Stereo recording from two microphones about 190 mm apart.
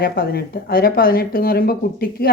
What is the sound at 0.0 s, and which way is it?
Speech, 55° left (ahead or behind).